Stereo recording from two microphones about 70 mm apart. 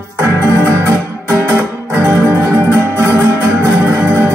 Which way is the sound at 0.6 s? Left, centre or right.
Right.